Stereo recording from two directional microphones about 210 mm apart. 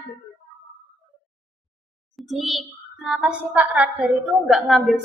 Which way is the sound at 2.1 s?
Centre (ahead or behind).